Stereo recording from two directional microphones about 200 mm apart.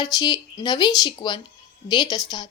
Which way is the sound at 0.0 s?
20° left (ahead or behind).